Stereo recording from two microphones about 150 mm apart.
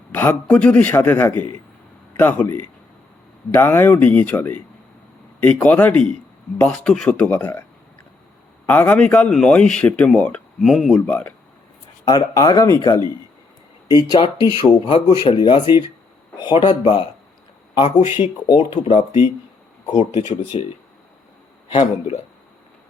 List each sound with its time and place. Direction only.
0.1 s speech: 10° left (ahead or behind)
8.6 s speech: 10° left (ahead or behind)
11.0 s speech: 10° left (ahead or behind)
12.0 s speech: 25° left (ahead or behind)
18.8 s speech: 50° left (ahead or behind)
20.1 s speech: 35° left (ahead or behind)
21.7 s speech: 45° left (ahead or behind)